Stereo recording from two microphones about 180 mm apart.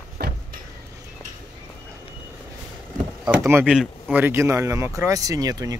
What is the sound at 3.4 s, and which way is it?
Speech, 15° right (ahead or behind).